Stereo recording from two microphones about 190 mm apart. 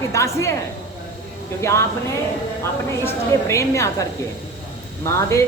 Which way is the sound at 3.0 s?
15° left (ahead or behind).